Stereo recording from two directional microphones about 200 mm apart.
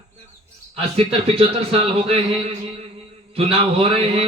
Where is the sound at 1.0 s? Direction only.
30° right (ahead or behind).